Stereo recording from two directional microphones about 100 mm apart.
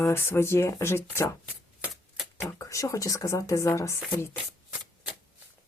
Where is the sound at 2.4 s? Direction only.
25° left (ahead or behind).